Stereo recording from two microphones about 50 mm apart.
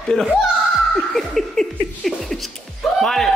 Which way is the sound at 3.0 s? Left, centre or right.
Centre.